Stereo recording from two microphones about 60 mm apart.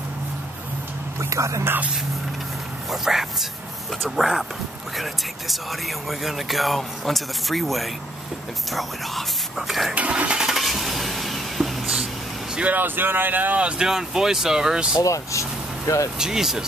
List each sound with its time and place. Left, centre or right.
1.3 s speech: right
2.9 s speech: centre
9.9 s engine starting: right
10.4 s vehicle: centre
12.7 s speech: right
13.7 s speech: centre
15.0 s speech: left
16.2 s speech: centre